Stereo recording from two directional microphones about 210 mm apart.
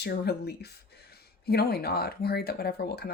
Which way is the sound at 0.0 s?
50° left (ahead or behind).